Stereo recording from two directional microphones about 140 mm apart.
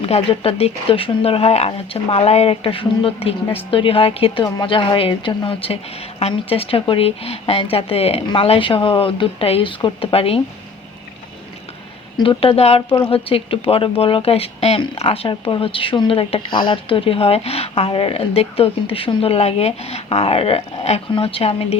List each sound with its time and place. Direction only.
0.0 s a woman's voice: 45° left (ahead or behind)
12.1 s a woman's voice: 35° left (ahead or behind)